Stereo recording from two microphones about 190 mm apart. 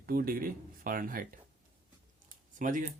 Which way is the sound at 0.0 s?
50° right (ahead or behind).